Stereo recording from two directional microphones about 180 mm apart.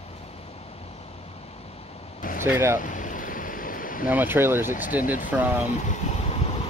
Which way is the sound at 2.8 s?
45° left (ahead or behind).